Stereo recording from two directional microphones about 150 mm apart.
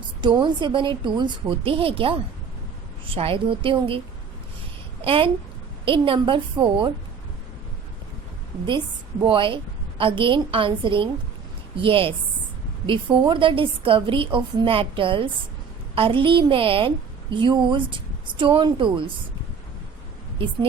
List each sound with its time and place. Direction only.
0.2 s a woman's voice: 30° right (ahead or behind)
5.0 s a woman's voice: 35° right (ahead or behind)
9.2 s a woman's voice: 35° right (ahead or behind)